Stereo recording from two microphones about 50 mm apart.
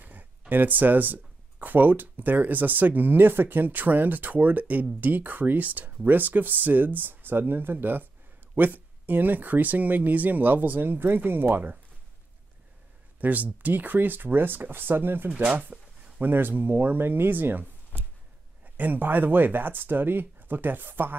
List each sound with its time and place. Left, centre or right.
0.0 s a sound: right
0.5 s speech: right
13.2 s speech: right
15.7 s a sound: right
16.2 s speech: right
18.8 s speech: right